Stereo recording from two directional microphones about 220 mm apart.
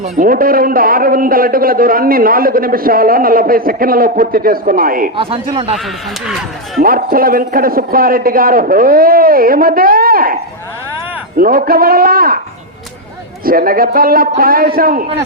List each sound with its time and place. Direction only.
0.0 s a man's voice: 40° right (ahead or behind)
5.1 s speech: 25° right (ahead or behind)
6.2 s speech: centre (ahead or behind)
6.8 s a man's voice: 40° right (ahead or behind)
11.3 s a man's voice: 40° right (ahead or behind)
13.4 s a man's voice: 40° right (ahead or behind)